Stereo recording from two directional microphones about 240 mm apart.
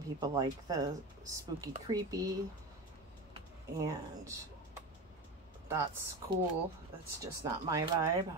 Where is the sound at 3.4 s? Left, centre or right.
Centre.